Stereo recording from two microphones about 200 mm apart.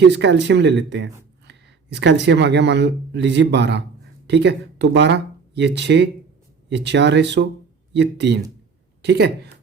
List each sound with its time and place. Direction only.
0.0 s speech: 60° right (ahead or behind)